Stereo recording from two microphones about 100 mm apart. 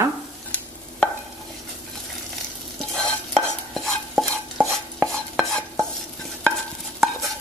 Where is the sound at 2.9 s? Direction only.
5° left (ahead or behind).